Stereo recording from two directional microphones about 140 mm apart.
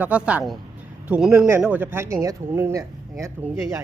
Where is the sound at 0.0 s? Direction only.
10° right (ahead or behind).